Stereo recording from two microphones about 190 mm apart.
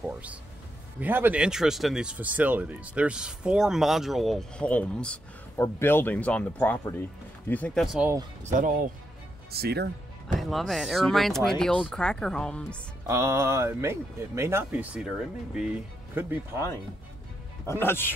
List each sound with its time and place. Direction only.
0.0 s speech: 5° right (ahead or behind)
8.5 s speech: 45° right (ahead or behind)
9.5 s speech: 55° right (ahead or behind)
10.3 s speech: centre (ahead or behind)
13.0 s speech: 15° right (ahead or behind)
17.6 s speech: 10° left (ahead or behind)